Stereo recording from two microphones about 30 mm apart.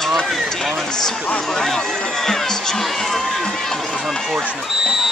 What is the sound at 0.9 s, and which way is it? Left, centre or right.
Speech, centre.